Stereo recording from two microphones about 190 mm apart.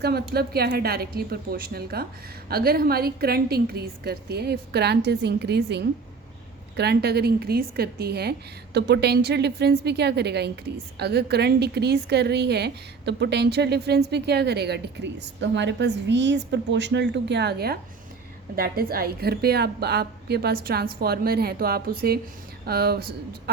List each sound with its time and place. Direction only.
0.0 s a woman's voice: 55° right (ahead or behind)